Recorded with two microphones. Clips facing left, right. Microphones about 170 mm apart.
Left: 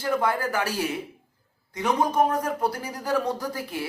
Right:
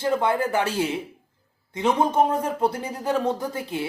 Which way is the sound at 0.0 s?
25° right (ahead or behind).